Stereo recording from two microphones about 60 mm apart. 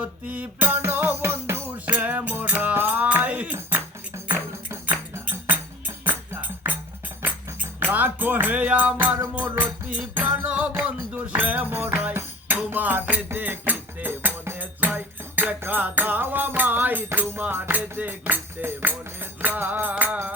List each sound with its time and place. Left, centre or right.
0.0 s music: right
1.8 s music: right
5.2 s music: right
11.7 s music: right
12.5 s music: right